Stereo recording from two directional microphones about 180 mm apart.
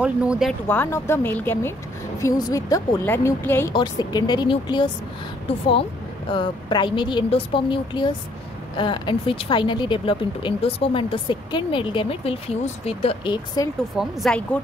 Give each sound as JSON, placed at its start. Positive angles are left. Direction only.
{"t": 0.0, "sound": "speech", "side_deg": -5}
{"t": 0.7, "sound": "speech", "side_deg": 15}
{"t": 6.3, "sound": "speech", "side_deg": 25}
{"t": 13.9, "sound": "speech", "side_deg": 0}